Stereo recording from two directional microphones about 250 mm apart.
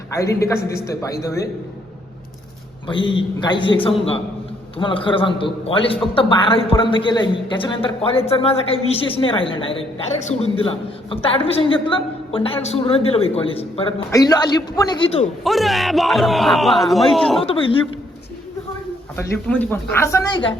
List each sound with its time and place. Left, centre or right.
0.1 s speech: centre
2.8 s a woman's voice: centre
4.8 s a woman's voice: centre
15.4 s speech: centre
17.4 s a woman's voice: left
19.1 s speech: centre